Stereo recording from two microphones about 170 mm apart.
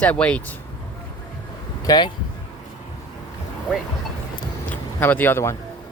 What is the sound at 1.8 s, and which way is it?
Speech, 20° left (ahead or behind).